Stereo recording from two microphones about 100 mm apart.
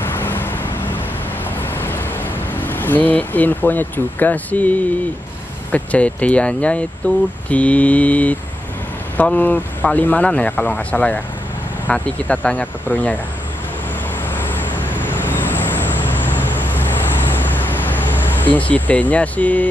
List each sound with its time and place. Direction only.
0.0 s vehicle: 20° left (ahead or behind)
2.5 s speech: 20° left (ahead or behind)
14.3 s vehicle: 20° left (ahead or behind)